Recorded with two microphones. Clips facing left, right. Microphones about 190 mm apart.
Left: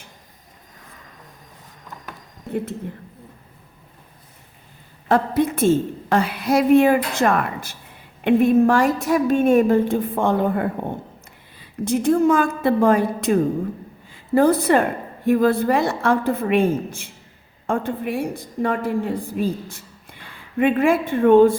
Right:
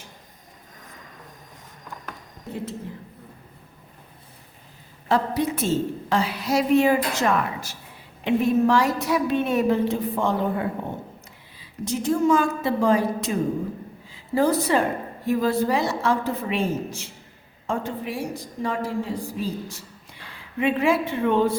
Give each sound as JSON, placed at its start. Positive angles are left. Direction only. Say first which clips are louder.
{"t": 5.0, "sound": "a woman's voice", "louder": "left 4 dB", "side_deg": 55}